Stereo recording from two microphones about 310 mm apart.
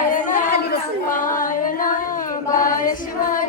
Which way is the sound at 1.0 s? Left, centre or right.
Left.